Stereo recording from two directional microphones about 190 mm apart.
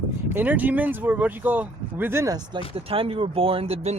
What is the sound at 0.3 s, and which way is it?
Speech, 10° right (ahead or behind).